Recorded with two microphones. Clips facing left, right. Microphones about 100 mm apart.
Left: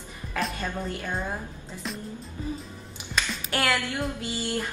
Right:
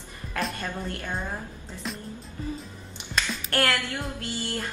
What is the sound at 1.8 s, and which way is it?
Speech, centre (ahead or behind).